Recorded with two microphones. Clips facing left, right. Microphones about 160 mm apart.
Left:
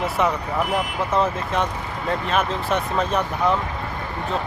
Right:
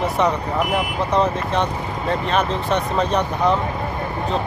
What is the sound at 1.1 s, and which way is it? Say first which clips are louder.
Speech: right 3 dB; 5° left (ahead or behind).